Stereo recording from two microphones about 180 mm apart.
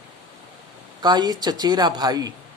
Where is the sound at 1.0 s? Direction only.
25° right (ahead or behind).